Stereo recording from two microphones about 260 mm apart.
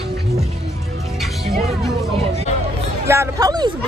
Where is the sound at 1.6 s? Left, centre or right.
Centre.